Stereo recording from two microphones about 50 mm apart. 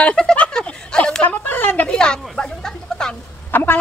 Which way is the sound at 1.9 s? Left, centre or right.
Centre.